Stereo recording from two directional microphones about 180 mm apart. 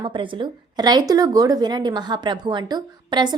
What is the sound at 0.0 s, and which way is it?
A woman's voice, 25° right (ahead or behind).